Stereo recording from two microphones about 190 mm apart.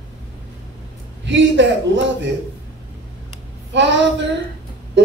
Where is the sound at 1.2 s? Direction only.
70° right (ahead or behind).